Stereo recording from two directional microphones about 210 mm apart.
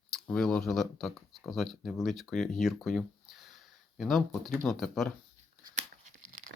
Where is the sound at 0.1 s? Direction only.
Centre (ahead or behind).